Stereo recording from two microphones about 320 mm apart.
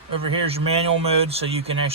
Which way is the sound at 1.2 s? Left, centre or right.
Centre.